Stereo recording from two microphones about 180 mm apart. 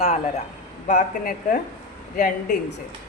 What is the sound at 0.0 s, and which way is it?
Speech, 35° left (ahead or behind).